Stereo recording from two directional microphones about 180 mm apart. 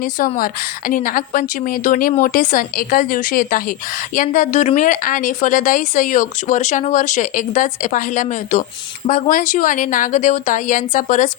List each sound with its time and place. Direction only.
0.0 s a woman's voice: 50° left (ahead or behind)